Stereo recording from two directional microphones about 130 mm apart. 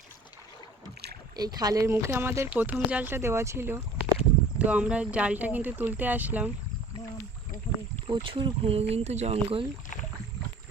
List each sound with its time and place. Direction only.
1.4 s speech: 30° right (ahead or behind); by 6.5 s 10° right (ahead or behind)
8.0 s speech: 40° right (ahead or behind)